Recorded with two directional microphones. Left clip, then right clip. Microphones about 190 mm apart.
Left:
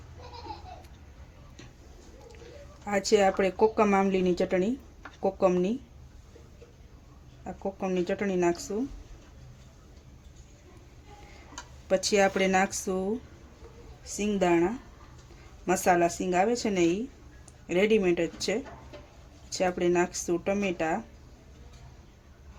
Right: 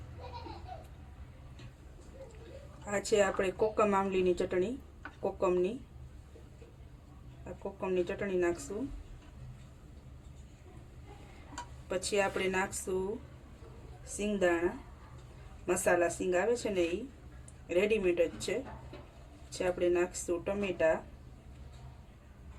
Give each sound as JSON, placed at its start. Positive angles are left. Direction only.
{"t": 2.8, "sound": "speech", "side_deg": 50}
{"t": 7.8, "sound": "speech", "side_deg": 55}
{"t": 11.9, "sound": "speech", "side_deg": 60}
{"t": 15.6, "sound": "speech", "side_deg": 55}